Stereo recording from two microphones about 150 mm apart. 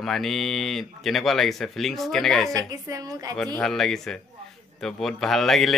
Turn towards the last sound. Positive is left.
turn(degrees=0)  # may be behind; listen again after turning